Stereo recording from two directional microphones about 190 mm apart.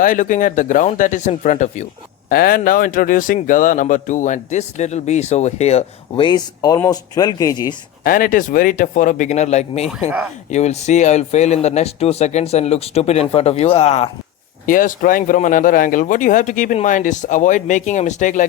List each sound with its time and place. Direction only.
0.0 s speech: 45° left (ahead or behind)
2.3 s speech: 50° left (ahead or behind); by 7.8 s 20° left (ahead or behind)
8.0 s speech: 45° left (ahead or behind)
14.7 s speech: 45° left (ahead or behind)